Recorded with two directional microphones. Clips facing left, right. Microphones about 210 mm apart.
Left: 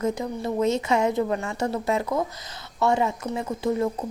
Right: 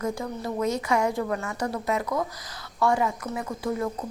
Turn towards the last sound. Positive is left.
turn(degrees=25)  # may be behind; listen again after turning